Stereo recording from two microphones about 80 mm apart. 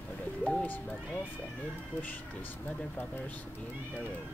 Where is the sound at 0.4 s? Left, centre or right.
Left.